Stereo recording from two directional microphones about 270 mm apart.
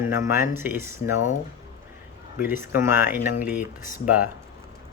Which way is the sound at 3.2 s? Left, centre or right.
Left.